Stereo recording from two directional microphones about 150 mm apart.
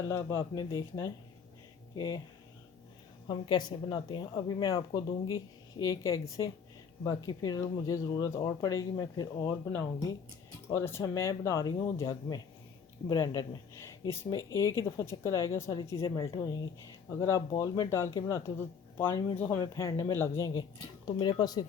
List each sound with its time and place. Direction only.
0.1 s speech: 20° left (ahead or behind)
3.2 s speech: 30° left (ahead or behind)
5.8 s speech: 25° left (ahead or behind)
15.8 s speech: 30° left (ahead or behind)
21.2 s speech: 30° left (ahead or behind)